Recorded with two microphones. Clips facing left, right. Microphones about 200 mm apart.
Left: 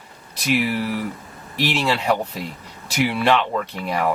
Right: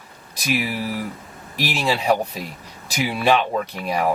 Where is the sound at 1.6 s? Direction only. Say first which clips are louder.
Even; 10° right (ahead or behind).